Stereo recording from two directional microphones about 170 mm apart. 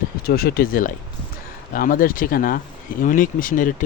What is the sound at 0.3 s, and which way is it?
Speech, 65° left (ahead or behind).